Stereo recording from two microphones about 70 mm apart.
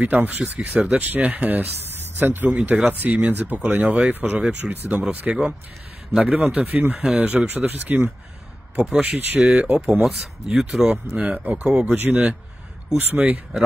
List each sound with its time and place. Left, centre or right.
0.0 s speech: right
0.4 s speech: centre
0.9 s speech: right
3.6 s speech: centre
4.1 s speech: right
4.4 s speech: centre
6.5 s speech: right
6.8 s speech: centre
7.4 s speech: right
10.0 s speech: centre
11.1 s speech: right
11.9 s speech: right